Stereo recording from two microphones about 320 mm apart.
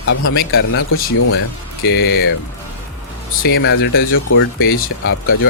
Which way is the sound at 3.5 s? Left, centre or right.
Left.